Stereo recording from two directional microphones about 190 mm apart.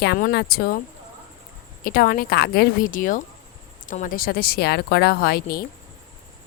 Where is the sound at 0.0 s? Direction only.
55° left (ahead or behind).